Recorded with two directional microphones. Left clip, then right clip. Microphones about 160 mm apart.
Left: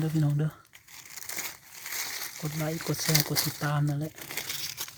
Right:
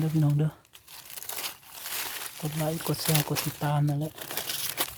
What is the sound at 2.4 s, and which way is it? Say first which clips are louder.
Speech: right 3 dB; centre (ahead or behind).